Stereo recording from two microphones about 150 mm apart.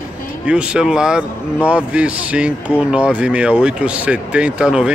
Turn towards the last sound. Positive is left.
turn(degrees=-5)  # may be behind; listen again after turning